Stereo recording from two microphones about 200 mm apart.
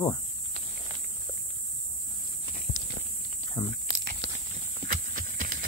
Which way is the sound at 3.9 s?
60° right (ahead or behind).